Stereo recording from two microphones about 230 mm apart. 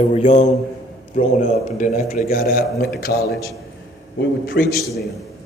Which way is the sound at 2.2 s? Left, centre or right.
Left.